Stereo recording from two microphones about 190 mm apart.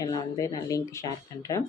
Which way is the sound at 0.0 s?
15° left (ahead or behind).